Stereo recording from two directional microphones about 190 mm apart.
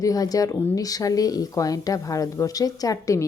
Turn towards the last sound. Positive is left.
turn(degrees=20)  # may be behind; listen again after turning